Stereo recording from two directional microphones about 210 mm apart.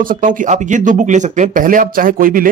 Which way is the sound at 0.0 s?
40° right (ahead or behind).